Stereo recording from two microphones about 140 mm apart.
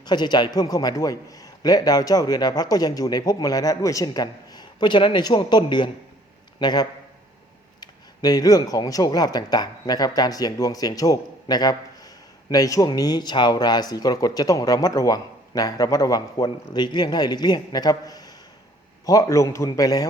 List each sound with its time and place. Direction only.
0.0 s a man's voice: 30° left (ahead or behind)